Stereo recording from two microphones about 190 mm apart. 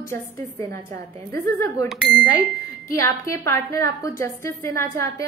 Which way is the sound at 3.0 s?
15° left (ahead or behind).